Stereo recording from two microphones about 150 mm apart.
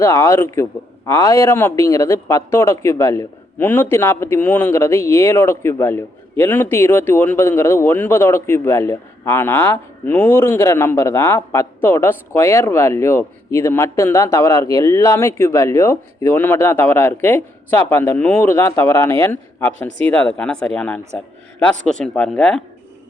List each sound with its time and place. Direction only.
0.0 s a man's voice: 20° left (ahead or behind)